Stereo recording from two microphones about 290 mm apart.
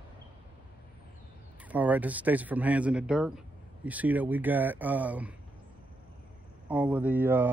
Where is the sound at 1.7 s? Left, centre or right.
Centre.